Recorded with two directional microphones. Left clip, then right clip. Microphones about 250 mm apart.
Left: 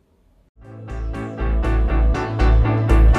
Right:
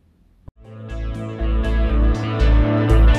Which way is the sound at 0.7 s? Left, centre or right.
Centre.